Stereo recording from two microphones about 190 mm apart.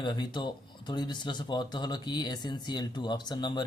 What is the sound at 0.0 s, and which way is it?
Speech, 25° left (ahead or behind).